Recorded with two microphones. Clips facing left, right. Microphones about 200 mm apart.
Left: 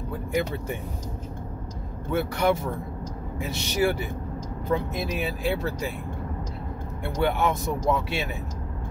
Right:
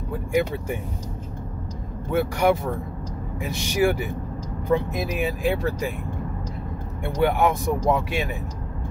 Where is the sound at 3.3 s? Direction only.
15° right (ahead or behind).